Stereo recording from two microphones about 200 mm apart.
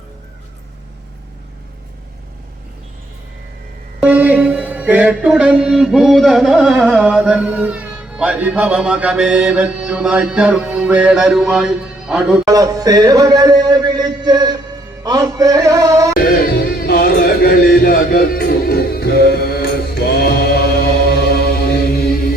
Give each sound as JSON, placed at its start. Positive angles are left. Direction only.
{"t": 4.0, "sound": "mantra", "side_deg": -5}
{"t": 12.5, "sound": "a sound", "side_deg": -15}
{"t": 15.0, "sound": "music", "side_deg": -20}
{"t": 16.1, "sound": "music", "side_deg": 50}